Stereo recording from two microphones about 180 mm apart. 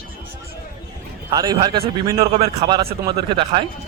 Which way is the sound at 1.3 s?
20° right (ahead or behind).